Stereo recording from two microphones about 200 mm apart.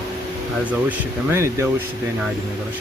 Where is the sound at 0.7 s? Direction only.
10° right (ahead or behind).